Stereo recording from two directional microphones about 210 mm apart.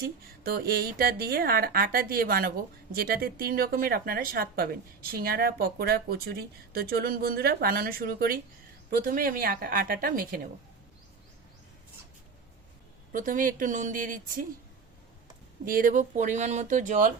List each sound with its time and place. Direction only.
0.0 s a woman's voice: 45° right (ahead or behind)
13.1 s speech: 40° right (ahead or behind)
15.6 s speech: 40° right (ahead or behind)